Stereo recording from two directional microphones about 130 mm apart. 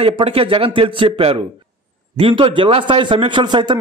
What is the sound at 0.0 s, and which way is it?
A man's voice, 50° right (ahead or behind).